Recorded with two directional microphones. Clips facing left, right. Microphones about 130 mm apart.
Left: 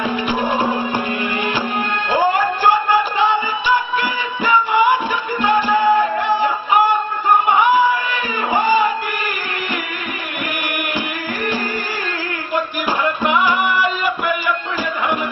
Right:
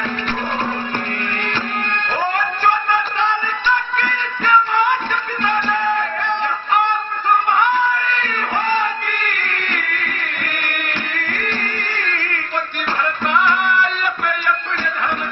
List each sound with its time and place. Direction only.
2.1 s music: 10° left (ahead or behind)